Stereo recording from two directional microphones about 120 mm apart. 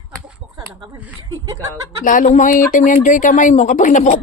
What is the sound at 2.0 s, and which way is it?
Speech, 80° left.